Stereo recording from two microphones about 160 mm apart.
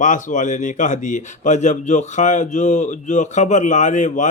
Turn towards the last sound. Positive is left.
turn(degrees=50)  # may be behind; listen again after turning